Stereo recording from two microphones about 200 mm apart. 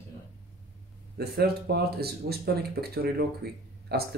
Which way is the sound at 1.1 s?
50° right (ahead or behind).